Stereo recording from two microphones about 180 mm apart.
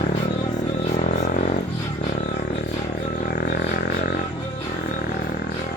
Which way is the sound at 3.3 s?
60° left (ahead or behind).